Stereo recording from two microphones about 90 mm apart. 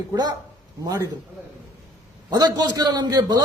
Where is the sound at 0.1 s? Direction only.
50° right (ahead or behind).